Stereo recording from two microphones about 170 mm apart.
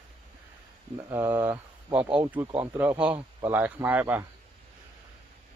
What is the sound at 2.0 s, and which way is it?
Speech, 30° right (ahead or behind).